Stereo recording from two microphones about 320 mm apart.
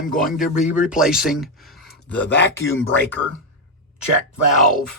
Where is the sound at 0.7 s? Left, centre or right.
Centre.